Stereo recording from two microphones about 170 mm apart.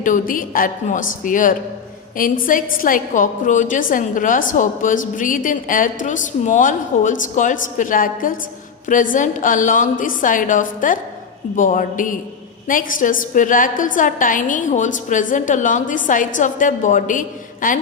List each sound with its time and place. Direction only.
0.0 s a woman's voice: 50° left (ahead or behind)